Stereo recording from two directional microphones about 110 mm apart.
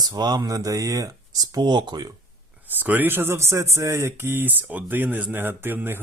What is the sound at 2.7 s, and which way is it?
Speech, 15° right (ahead or behind).